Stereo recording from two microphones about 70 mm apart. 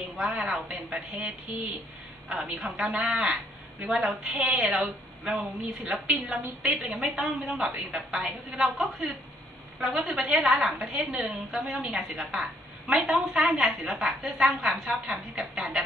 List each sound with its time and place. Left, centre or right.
0.2 s a woman's voice: centre
5.3 s a woman's voice: centre